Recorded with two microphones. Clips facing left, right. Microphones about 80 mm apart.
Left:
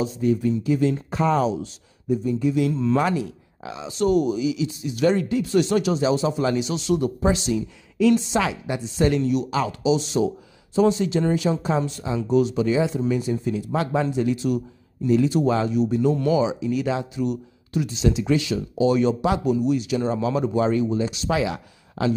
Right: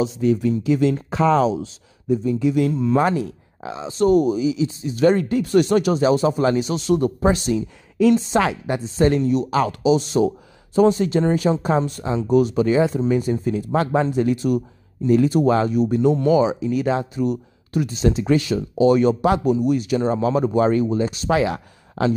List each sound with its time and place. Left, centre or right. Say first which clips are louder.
0.0 s speech: right 3 dB; right
2.7 s speech: right 2 dB; centre
3.0 s a woman's voice: right 3 dB; right
9.6 s speech: right 5 dB; right